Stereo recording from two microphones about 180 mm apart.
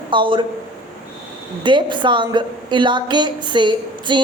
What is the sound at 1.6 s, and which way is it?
A woman's voice, 25° right (ahead or behind).